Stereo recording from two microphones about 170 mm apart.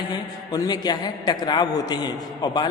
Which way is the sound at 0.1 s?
25° left (ahead or behind).